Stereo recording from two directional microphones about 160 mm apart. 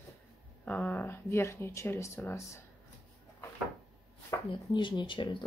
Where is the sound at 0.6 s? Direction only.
10° left (ahead or behind).